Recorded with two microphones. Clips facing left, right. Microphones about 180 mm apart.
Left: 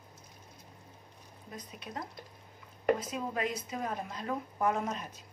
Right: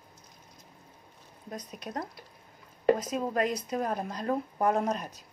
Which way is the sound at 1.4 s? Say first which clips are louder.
Right 6 dB; 40° right (ahead or behind).